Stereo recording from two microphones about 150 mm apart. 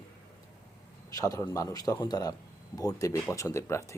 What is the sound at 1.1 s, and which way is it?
Speech, 25° left (ahead or behind).